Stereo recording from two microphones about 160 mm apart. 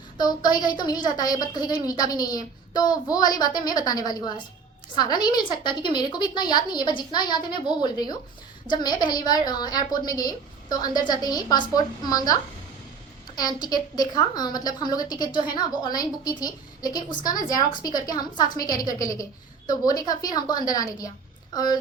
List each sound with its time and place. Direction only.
0.2 s a woman's voice: 25° left (ahead or behind)